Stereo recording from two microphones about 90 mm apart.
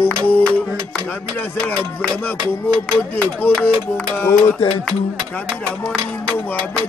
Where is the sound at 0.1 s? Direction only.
15° left (ahead or behind).